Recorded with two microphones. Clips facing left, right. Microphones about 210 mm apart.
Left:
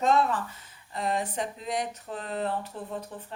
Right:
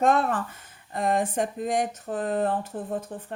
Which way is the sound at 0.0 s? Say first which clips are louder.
Right 2 dB; 50° right (ahead or behind).